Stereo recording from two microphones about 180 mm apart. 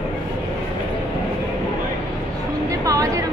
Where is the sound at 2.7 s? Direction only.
20° right (ahead or behind).